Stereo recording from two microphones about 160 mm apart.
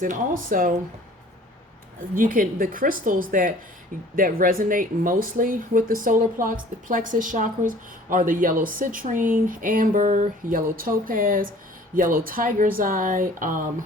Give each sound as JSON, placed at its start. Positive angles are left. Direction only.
{"t": 0.0, "sound": "speech", "side_deg": -60}
{"t": 2.1, "sound": "speech", "side_deg": -60}